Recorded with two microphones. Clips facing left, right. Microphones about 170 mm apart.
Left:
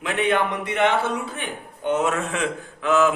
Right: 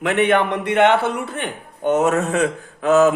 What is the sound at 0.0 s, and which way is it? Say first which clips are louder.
A man's voice: right 5 dB; 65° right (ahead or behind).